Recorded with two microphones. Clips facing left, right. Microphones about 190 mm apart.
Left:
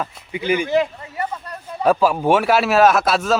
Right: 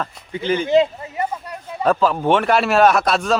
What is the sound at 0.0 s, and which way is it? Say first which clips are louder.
Speech: even; 10° left (ahead or behind).